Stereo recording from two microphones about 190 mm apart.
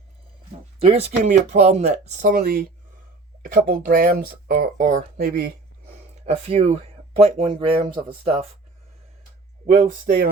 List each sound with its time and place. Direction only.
0.8 s speech: 35° right (ahead or behind)
2.3 s speech: 55° right (ahead or behind)
6.2 s speech: 35° right (ahead or behind)
9.6 s speech: 50° right (ahead or behind)